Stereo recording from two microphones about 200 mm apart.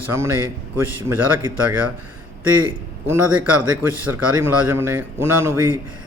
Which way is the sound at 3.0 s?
10° right (ahead or behind).